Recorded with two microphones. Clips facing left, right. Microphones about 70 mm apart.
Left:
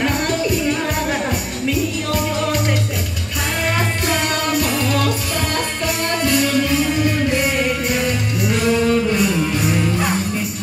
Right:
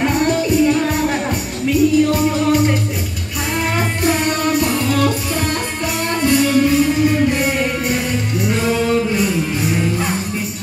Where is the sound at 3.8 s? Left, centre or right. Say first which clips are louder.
Right 2 dB; centre.